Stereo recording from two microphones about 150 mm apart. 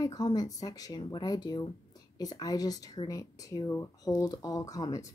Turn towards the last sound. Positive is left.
turn(degrees=25)  # may be behind; listen again after turning